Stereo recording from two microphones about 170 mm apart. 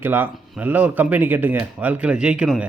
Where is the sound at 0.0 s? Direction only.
10° right (ahead or behind).